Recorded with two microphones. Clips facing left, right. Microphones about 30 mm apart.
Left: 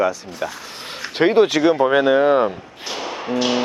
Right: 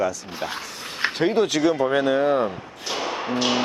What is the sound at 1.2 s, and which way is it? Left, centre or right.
Speech, left.